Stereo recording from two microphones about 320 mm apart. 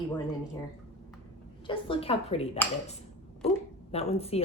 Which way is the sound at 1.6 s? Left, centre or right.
Centre.